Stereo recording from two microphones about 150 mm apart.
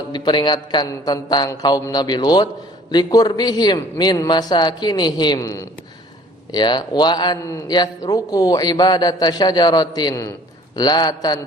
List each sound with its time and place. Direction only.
0.1 s a man's voice: 30° left (ahead or behind)